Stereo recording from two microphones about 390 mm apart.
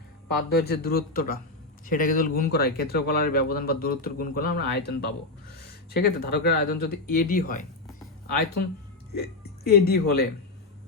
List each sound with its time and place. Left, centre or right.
0.3 s speech: left